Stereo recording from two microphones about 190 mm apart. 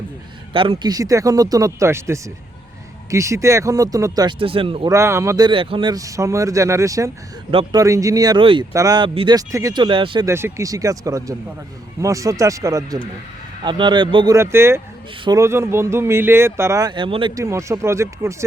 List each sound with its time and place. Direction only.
0.5 s speech: 30° right (ahead or behind)
4.9 s speech: 15° right (ahead or behind)
5.5 s speech: 30° right (ahead or behind)
10.2 s speech: 15° right (ahead or behind)
14.3 s speech: 15° right (ahead or behind)